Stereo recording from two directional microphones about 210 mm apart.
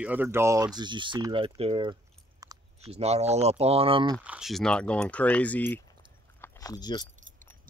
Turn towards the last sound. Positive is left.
turn(degrees=20)  # may be behind; listen again after turning